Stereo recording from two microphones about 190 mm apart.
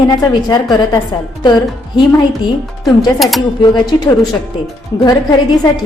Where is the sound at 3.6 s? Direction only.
20° left (ahead or behind).